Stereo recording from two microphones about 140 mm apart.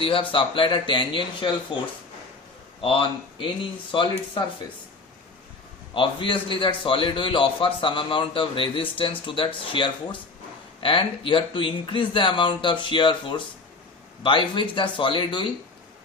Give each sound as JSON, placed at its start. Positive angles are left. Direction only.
{"t": 0.0, "sound": "a man's voice", "side_deg": 35}
{"t": 2.8, "sound": "a man's voice", "side_deg": 40}
{"t": 5.9, "sound": "a man's voice", "side_deg": 35}